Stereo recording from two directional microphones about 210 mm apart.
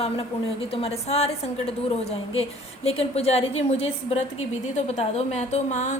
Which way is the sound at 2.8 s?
30° left (ahead or behind).